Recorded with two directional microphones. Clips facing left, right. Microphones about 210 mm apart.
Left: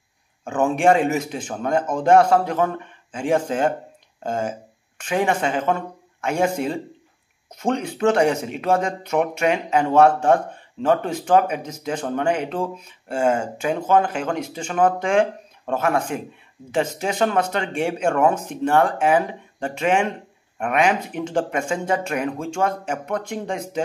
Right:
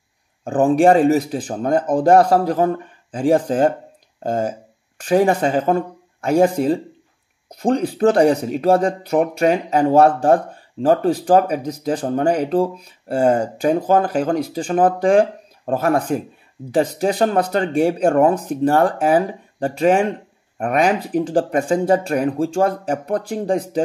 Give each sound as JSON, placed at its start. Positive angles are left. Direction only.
{"t": 0.4, "sound": "speech", "side_deg": -35}